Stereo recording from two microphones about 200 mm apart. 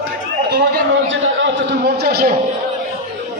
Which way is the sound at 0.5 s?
55° right (ahead or behind).